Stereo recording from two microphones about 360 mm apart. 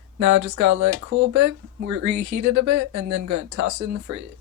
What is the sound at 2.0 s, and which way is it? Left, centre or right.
Speech, right.